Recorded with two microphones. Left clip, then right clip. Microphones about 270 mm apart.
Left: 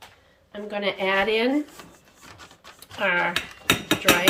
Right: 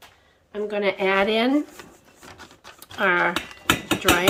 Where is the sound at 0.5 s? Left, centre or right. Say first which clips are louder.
Right 3 dB; centre.